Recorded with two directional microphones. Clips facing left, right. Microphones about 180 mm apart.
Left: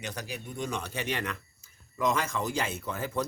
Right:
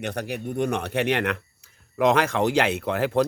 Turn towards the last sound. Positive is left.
turn(degrees=-70)  # may be behind; listen again after turning